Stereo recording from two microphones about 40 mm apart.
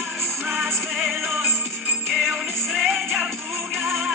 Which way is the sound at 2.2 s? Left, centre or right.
Centre.